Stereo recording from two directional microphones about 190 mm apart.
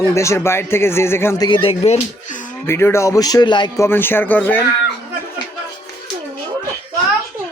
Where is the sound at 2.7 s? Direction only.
15° left (ahead or behind).